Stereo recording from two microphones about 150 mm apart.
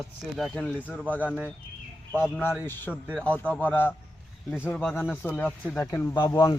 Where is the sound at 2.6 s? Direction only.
15° left (ahead or behind).